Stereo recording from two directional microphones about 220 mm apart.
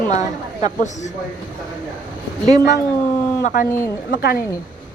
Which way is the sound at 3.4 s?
40° left (ahead or behind).